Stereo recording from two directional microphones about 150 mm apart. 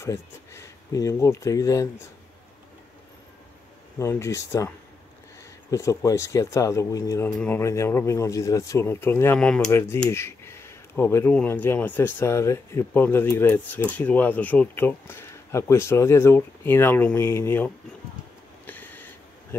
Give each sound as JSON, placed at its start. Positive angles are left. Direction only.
{"t": 0.0, "sound": "speech", "side_deg": 20}
{"t": 4.0, "sound": "speech", "side_deg": 15}
{"t": 9.7, "sound": "speech", "side_deg": 15}
{"t": 18.7, "sound": "a sound", "side_deg": 10}